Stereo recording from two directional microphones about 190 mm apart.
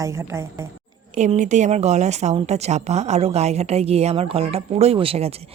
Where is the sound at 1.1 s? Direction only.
35° right (ahead or behind).